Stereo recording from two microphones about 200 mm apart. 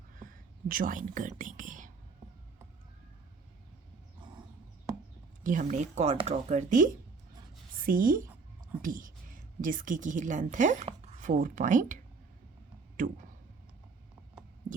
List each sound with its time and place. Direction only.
0.2 s speech: 45° right (ahead or behind)
5.4 s a woman's voice: 40° right (ahead or behind)